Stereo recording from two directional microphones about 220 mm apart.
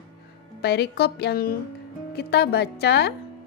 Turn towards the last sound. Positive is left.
turn(degrees=50)  # may be behind; listen again after turning